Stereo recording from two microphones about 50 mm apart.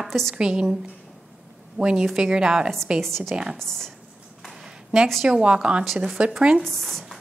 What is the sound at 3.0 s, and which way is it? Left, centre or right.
Speech, centre.